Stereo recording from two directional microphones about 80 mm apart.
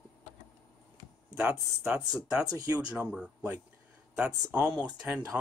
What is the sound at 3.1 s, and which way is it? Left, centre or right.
Speech, centre.